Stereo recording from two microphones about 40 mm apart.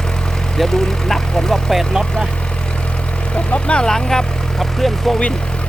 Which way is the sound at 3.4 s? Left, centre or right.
Left.